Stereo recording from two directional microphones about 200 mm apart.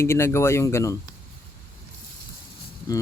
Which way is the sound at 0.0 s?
15° left (ahead or behind).